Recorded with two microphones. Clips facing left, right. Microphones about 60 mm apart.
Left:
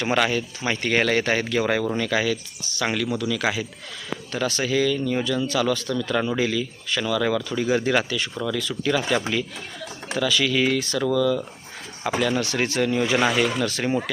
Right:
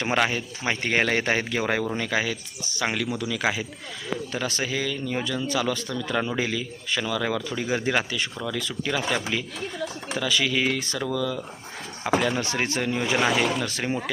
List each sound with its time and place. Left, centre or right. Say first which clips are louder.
0.0 s speech: left 2 dB; centre
4.3 s speech: left 7 dB; centre